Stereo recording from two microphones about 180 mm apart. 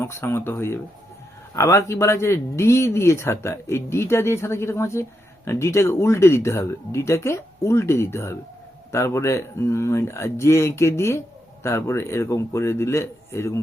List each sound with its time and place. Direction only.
0.0 s speech: 15° left (ahead or behind)